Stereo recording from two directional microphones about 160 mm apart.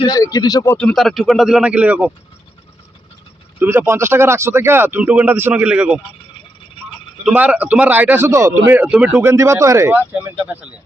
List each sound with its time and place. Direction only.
0.0 s speech: 20° left (ahead or behind)
0.8 s speech: 5° left (ahead or behind)
3.6 s speech: 15° right (ahead or behind)
7.3 s speech: 10° right (ahead or behind)